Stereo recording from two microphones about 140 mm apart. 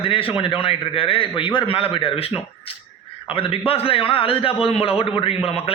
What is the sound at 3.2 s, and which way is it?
A man's voice, 40° left (ahead or behind).